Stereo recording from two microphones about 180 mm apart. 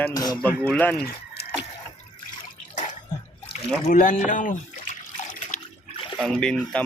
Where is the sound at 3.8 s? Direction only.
45° left (ahead or behind).